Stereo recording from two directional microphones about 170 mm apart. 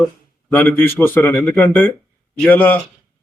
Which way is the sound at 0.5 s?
10° left (ahead or behind).